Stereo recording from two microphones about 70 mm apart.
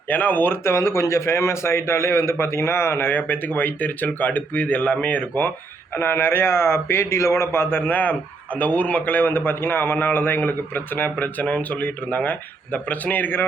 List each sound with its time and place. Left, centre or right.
0.1 s a man's voice: left